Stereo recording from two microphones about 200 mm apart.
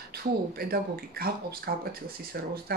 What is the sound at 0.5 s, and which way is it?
Speech, 50° right (ahead or behind).